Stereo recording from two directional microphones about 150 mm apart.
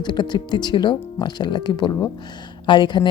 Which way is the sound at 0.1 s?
30° left (ahead or behind).